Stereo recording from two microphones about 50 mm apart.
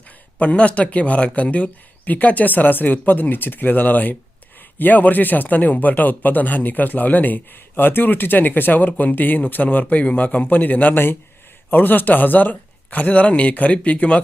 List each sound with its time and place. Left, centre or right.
0.3 s a man's voice: left